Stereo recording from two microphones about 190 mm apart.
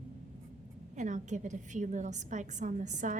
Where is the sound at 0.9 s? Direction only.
40° right (ahead or behind).